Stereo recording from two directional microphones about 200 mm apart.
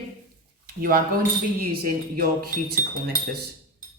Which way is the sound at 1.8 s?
50° right (ahead or behind).